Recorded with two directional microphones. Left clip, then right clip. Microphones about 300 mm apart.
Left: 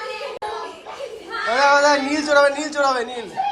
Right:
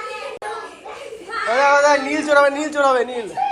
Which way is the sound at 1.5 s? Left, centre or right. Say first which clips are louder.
Right 1 dB; centre.